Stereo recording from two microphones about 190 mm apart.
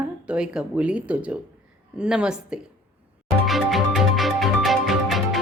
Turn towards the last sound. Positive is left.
turn(degrees=0)  # may be behind; listen again after turning